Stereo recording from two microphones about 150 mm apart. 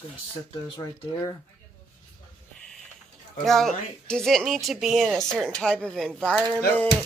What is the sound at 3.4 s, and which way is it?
Speech, centre (ahead or behind).